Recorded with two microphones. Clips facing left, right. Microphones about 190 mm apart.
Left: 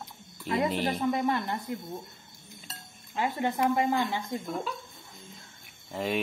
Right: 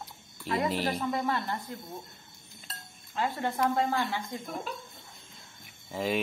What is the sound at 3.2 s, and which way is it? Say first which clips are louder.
Speech: left 2 dB; 15° left (ahead or behind).